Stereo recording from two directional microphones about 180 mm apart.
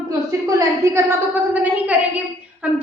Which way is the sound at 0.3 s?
15° right (ahead or behind).